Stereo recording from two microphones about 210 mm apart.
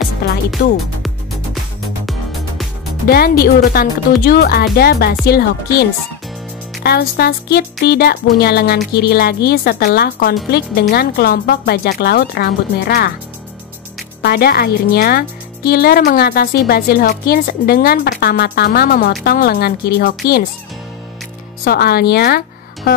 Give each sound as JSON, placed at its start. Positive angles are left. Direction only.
{"t": 0.2, "sound": "music", "side_deg": 50}
{"t": 0.6, "sound": "speech", "side_deg": 50}
{"t": 1.0, "sound": "music", "side_deg": 0}
{"t": 3.1, "sound": "speech", "side_deg": 45}
{"t": 14.2, "sound": "speech", "side_deg": 45}
{"t": 21.6, "sound": "speech", "side_deg": 45}
{"t": 22.8, "sound": "music", "side_deg": 50}